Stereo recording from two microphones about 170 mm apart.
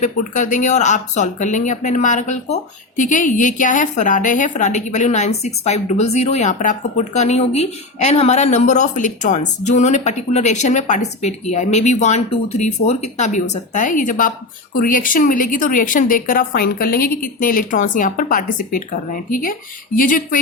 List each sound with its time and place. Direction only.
0.0 s speech: 50° left (ahead or behind)